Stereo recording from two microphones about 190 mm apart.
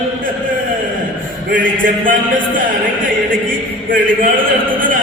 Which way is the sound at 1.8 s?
45° right (ahead or behind).